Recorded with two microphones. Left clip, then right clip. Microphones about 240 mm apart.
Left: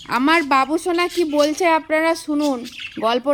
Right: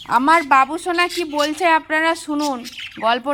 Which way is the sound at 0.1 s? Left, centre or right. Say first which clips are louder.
Right 3 dB; centre.